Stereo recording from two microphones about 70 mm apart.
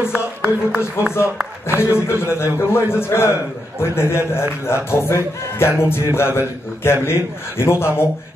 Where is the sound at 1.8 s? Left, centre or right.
Left.